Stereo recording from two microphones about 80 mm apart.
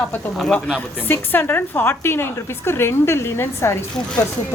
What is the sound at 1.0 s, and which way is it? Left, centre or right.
A woman's voice, left.